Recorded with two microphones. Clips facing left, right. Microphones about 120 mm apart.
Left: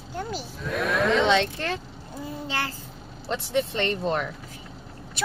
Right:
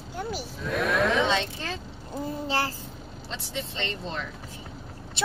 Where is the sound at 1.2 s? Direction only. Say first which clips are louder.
Left 4 dB; 65° left (ahead or behind).